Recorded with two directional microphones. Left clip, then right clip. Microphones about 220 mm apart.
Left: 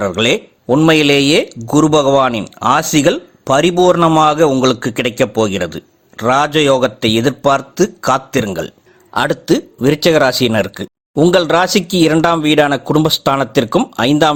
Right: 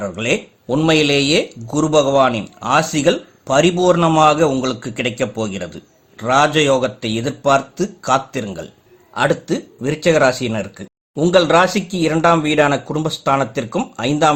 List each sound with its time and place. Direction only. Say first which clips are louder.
0.0 s speech: left 6 dB; 40° left (ahead or behind)